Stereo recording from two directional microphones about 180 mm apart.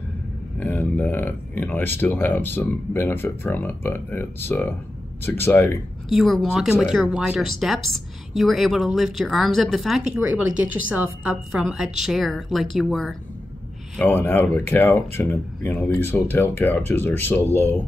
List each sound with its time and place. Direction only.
0.6 s speech: 10° left (ahead or behind)
6.0 s speech: centre (ahead or behind)
13.9 s speech: 10° left (ahead or behind)